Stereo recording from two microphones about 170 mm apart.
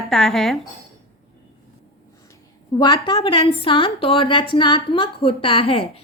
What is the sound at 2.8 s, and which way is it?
A woman's voice, 25° left (ahead or behind).